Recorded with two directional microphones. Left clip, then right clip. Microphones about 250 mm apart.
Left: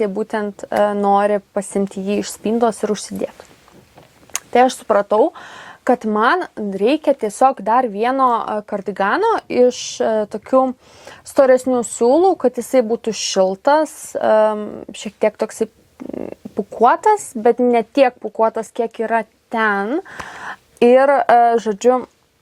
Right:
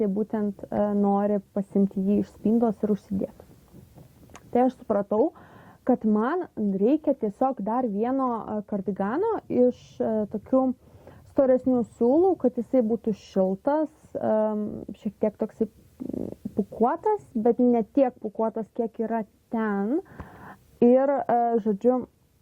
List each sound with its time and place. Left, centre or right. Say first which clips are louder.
0.3 s speech: left 9 dB; centre
13.0 s speech: left 9 dB; centre